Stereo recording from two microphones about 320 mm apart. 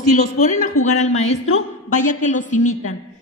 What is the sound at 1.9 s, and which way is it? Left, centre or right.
Speech, left.